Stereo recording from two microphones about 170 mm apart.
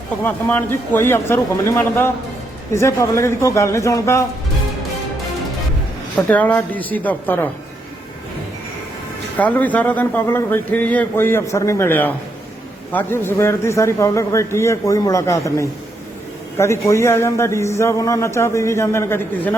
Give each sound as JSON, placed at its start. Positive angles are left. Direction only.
{"t": 0.3, "sound": "a man's voice", "side_deg": 10}
{"t": 6.1, "sound": "a man's voice", "side_deg": 10}
{"t": 9.4, "sound": "a man's voice", "side_deg": 10}